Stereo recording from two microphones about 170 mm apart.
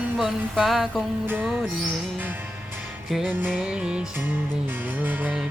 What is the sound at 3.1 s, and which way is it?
Music, centre (ahead or behind).